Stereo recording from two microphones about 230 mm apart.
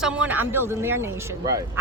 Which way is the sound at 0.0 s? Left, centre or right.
Centre.